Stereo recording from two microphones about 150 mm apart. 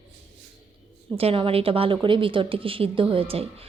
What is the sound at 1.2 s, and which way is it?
A woman's voice, 40° right (ahead or behind).